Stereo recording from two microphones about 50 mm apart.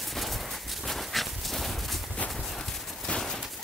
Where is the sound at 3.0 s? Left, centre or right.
Centre.